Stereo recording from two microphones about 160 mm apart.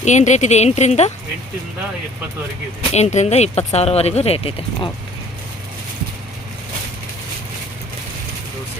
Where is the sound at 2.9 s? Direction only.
45° left (ahead or behind).